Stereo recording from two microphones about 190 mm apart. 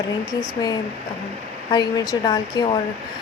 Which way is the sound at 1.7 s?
20° left (ahead or behind).